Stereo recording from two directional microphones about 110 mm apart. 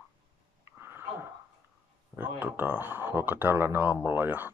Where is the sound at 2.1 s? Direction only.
15° right (ahead or behind).